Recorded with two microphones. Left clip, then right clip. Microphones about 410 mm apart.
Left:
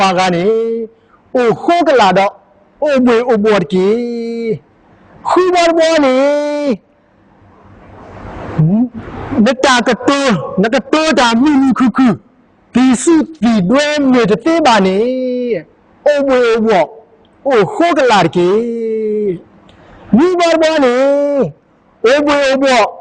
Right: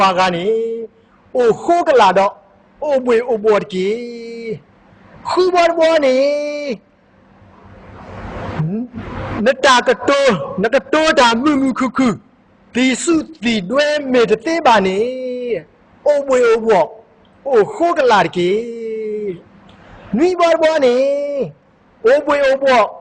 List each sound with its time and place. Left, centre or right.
0.0 s a man's voice: left
1.4 s a man's voice: left
9.4 s a man's voice: left
20.4 s a man's voice: left
20.9 s a sound: left
22.0 s a man's voice: left